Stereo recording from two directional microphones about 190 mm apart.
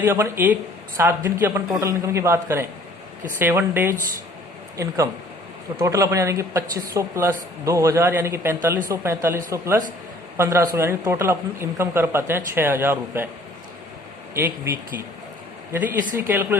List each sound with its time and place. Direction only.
0.0 s speech: 15° right (ahead or behind)
5.8 s speech: 15° right (ahead or behind)
14.3 s speech: 15° right (ahead or behind)
15.7 s speech: 10° right (ahead or behind)